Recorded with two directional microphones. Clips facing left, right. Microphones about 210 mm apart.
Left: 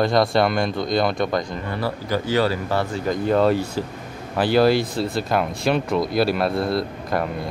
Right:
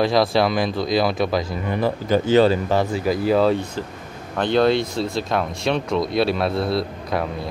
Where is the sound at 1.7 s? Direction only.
20° right (ahead or behind).